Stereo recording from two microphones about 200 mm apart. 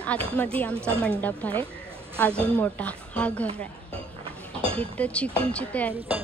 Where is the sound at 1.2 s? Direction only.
10° left (ahead or behind).